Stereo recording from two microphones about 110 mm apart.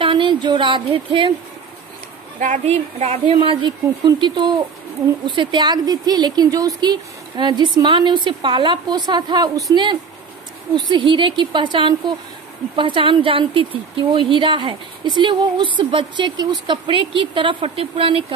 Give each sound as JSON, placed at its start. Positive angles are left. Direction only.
{"t": 0.0, "sound": "speech", "side_deg": -50}
{"t": 2.6, "sound": "a woman's voice", "side_deg": -85}
{"t": 3.3, "sound": "speech", "side_deg": -45}